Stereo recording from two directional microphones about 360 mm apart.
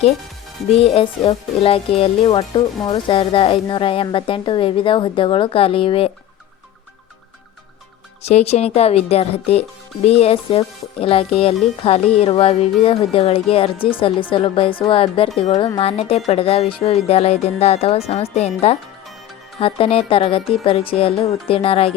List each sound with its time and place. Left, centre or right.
0.8 s speech: centre
8.2 s speech: centre